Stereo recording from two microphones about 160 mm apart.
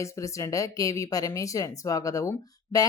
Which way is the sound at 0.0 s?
20° left (ahead or behind).